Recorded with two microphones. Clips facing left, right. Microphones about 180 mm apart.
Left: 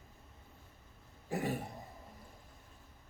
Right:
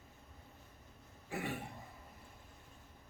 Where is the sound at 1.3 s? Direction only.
40° left (ahead or behind).